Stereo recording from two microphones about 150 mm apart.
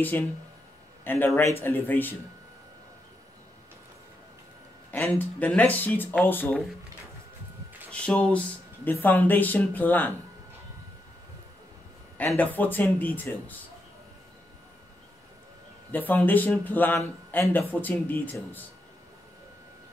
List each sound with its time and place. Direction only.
1.0 s speech: 15° left (ahead or behind)
4.9 s speech: 15° left (ahead or behind)
7.9 s speech: 5° left (ahead or behind)
12.3 s speech: 10° left (ahead or behind)
15.9 s speech: 10° left (ahead or behind)